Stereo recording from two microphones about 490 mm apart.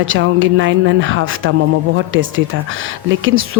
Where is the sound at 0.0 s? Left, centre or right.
Right.